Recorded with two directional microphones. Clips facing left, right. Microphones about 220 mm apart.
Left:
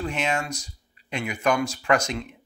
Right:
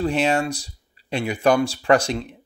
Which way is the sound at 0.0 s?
35° right (ahead or behind).